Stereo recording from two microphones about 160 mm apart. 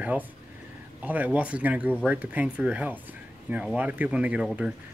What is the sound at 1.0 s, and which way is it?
Speech, 10° right (ahead or behind).